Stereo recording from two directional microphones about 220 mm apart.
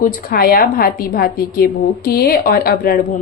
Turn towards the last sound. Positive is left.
turn(degrees=40)  # may be behind; listen again after turning